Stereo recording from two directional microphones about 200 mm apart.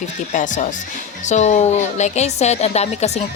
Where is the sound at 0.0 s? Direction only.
40° left (ahead or behind).